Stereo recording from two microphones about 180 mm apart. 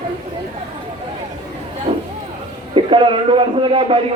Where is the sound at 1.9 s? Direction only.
30° right (ahead or behind).